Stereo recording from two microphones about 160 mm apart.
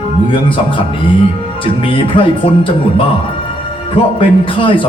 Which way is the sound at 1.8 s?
35° left (ahead or behind).